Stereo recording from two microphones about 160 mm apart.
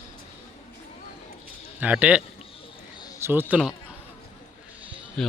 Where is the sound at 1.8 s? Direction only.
10° right (ahead or behind).